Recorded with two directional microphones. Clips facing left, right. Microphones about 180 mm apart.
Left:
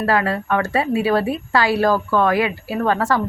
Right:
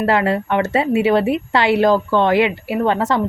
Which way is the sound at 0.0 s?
25° right (ahead or behind).